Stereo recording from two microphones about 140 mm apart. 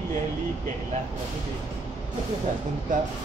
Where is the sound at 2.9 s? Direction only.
70° right (ahead or behind).